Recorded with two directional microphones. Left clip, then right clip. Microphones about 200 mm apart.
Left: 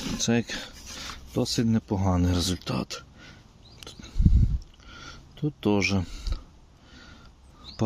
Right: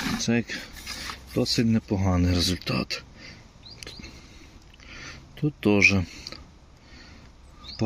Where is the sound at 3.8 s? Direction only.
10° left (ahead or behind).